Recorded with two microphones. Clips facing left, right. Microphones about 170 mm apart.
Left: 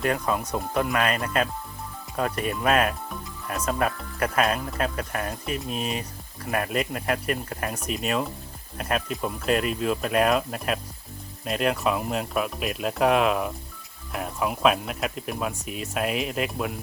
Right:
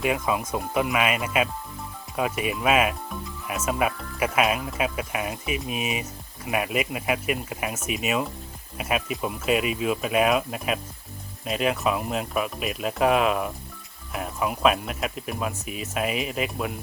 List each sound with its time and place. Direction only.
0.0 s speech: 5° right (ahead or behind)